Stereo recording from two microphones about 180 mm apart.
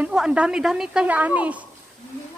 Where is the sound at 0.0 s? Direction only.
5° right (ahead or behind).